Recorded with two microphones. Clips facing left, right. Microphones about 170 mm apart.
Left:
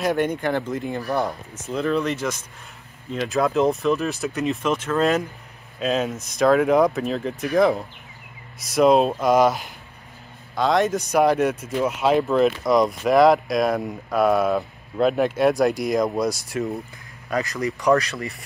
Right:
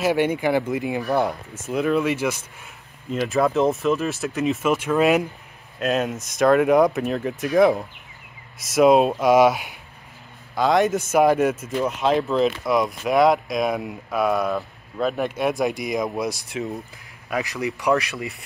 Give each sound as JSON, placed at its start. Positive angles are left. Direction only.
{"t": 0.0, "sound": "speech", "side_deg": -5}
{"t": 5.8, "sound": "speech", "side_deg": 0}